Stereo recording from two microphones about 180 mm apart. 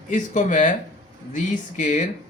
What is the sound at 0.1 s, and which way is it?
Speech, 45° left (ahead or behind).